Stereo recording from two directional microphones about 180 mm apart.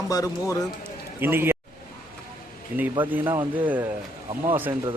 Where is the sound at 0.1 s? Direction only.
20° left (ahead or behind).